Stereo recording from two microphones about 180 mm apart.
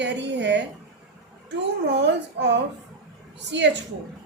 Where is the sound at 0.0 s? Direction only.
75° right (ahead or behind).